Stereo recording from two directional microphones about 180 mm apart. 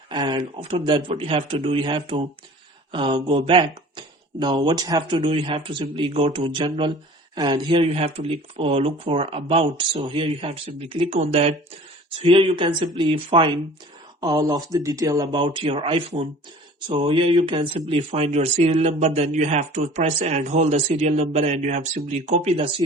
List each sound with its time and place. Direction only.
0.1 s speech: 25° right (ahead or behind)